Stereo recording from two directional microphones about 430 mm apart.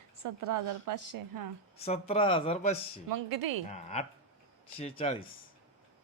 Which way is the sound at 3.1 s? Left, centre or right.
Right.